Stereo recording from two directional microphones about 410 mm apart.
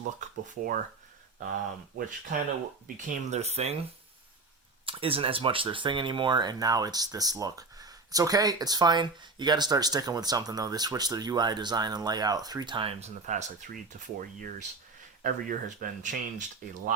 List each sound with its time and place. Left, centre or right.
0.0 s speech: centre
2.8 s speech: centre
4.9 s speech: centre